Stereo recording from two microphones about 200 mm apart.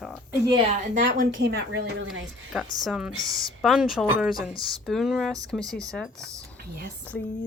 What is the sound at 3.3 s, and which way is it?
Speech, 20° right (ahead or behind).